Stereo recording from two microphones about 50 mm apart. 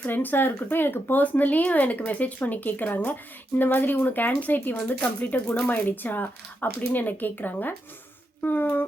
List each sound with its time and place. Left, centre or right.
0.0 s speech: left